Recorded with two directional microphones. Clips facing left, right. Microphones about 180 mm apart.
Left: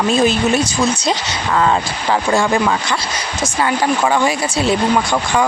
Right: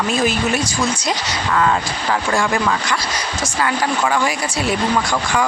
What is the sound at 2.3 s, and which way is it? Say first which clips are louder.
Speech: left 3 dB; 25° left (ahead or behind).